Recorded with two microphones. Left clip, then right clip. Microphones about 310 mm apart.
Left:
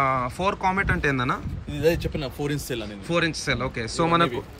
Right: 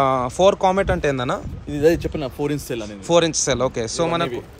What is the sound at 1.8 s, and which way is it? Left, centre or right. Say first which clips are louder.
Speech: right 5 dB; right.